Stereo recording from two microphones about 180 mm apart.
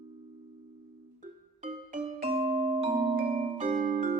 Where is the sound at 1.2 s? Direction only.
40° right (ahead or behind).